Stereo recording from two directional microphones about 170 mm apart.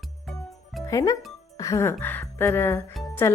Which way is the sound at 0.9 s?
20° left (ahead or behind).